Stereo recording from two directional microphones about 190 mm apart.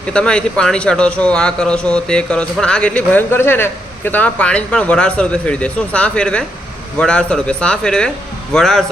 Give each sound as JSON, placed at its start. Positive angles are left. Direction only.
{"t": 0.1, "sound": "a man's voice", "side_deg": 5}